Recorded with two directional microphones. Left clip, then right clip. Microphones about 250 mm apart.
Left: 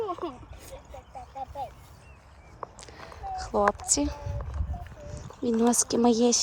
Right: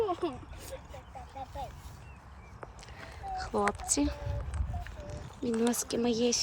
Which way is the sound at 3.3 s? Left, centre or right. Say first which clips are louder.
Left 6 dB; centre.